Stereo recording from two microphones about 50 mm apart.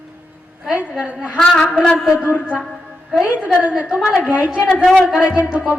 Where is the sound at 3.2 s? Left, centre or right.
Right.